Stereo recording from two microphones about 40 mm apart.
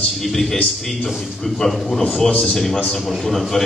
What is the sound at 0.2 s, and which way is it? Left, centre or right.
A man's voice, centre.